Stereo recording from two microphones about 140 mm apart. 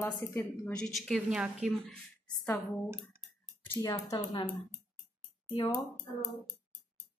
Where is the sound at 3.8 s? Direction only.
25° left (ahead or behind).